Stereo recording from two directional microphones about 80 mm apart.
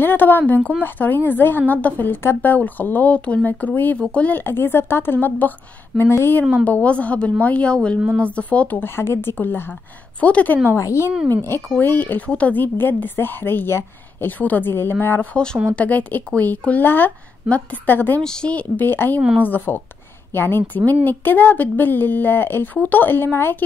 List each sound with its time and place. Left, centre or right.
0.0 s a woman's voice: left
0.6 s speech: centre
0.8 s a woman's voice: left
6.6 s a woman's voice: centre
10.8 s a woman's voice: left
11.8 s a woman's voice: left
15.3 s a woman's voice: centre
18.2 s a woman's voice: centre; by 23.6 s left